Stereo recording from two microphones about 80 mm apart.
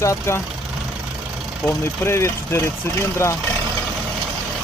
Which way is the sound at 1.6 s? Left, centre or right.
Left.